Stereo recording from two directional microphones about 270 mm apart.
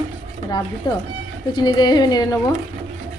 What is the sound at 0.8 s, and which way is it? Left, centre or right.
A woman's voice, centre.